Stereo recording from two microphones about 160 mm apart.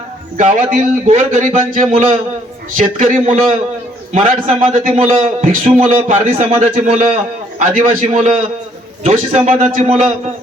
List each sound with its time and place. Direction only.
0.7 s a man's voice: 50° right (ahead or behind)